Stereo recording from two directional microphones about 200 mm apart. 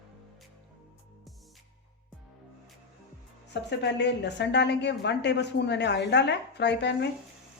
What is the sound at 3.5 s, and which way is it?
A woman's voice, 60° left (ahead or behind).